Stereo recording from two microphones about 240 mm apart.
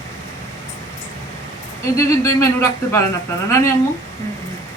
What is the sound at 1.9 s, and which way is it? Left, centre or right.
Speech, centre.